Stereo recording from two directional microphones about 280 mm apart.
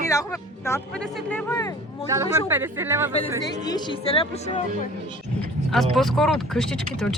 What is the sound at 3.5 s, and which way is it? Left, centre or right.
Speech, centre.